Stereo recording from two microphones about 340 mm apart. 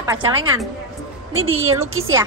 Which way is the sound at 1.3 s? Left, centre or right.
Right.